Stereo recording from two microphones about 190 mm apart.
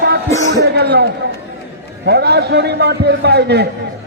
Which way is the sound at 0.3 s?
15° left (ahead or behind).